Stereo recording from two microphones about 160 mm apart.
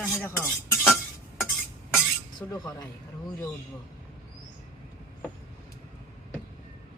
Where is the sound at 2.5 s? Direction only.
25° left (ahead or behind).